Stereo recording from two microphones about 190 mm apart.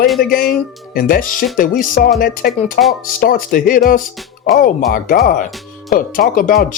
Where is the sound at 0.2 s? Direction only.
50° left (ahead or behind).